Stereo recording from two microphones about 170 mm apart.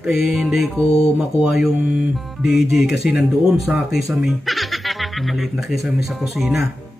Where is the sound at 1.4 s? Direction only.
5° right (ahead or behind).